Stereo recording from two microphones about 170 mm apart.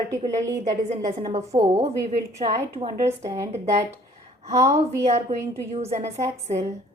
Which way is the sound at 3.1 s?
20° right (ahead or behind).